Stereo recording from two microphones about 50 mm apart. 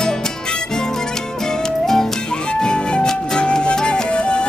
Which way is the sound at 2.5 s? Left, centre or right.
Centre.